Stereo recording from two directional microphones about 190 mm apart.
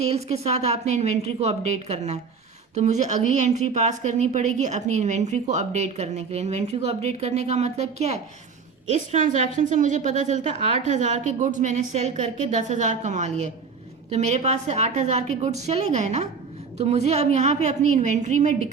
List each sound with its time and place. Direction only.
0.0 s a woman's voice: 35° right (ahead or behind)